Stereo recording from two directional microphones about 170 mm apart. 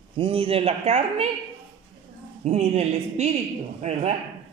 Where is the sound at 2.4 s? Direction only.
40° right (ahead or behind).